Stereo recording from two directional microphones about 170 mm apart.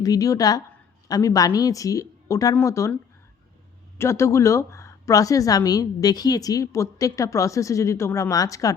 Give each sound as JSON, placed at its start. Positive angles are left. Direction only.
{"t": 0.0, "sound": "a woman's voice", "side_deg": 20}